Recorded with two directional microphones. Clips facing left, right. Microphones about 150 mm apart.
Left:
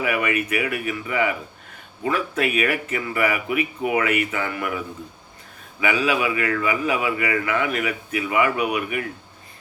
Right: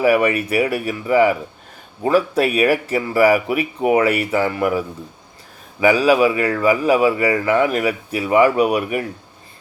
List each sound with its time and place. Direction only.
0.0 s speech: 35° right (ahead or behind)
5.8 s speech: 35° right (ahead or behind)